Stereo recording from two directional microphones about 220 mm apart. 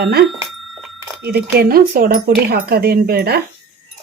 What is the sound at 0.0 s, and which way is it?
Speech, 45° right (ahead or behind).